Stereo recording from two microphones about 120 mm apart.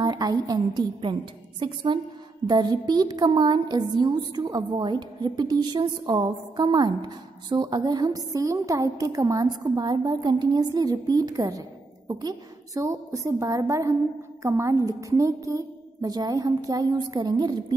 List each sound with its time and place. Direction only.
0.0 s a woman's voice: 35° right (ahead or behind)